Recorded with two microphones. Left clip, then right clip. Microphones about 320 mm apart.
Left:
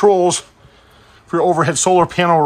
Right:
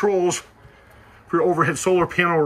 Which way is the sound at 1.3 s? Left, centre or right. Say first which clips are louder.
Left 4 dB; centre.